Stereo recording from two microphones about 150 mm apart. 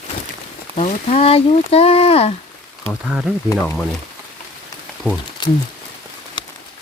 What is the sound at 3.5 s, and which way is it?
Speech, 15° left (ahead or behind).